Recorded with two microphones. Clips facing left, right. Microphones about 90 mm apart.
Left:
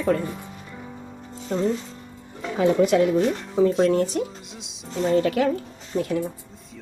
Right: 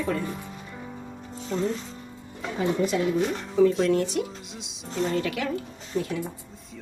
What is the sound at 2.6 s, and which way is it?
Speech, 85° left.